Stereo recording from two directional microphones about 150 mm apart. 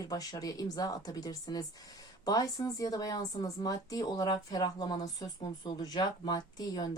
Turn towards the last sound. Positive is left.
turn(degrees=25)  # may be behind; listen again after turning